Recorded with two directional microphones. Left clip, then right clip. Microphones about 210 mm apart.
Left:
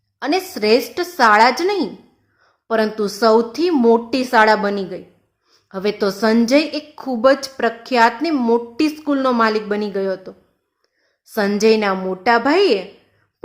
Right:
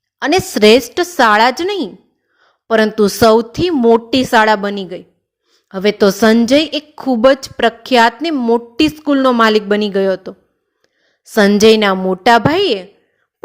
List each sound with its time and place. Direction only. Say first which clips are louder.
0.2 s a woman's voice: right 8 dB; 35° right (ahead or behind)